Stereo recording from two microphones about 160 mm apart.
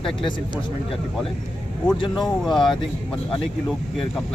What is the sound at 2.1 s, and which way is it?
Speech, centre (ahead or behind).